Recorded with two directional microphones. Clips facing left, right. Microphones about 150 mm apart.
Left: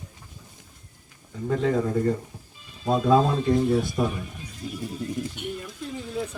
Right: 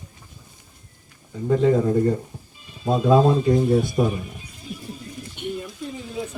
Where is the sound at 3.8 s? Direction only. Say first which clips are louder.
Right 4 dB; 5° right (ahead or behind).